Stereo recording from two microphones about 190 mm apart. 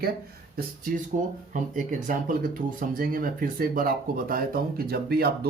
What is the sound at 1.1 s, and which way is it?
Speech, 40° right (ahead or behind).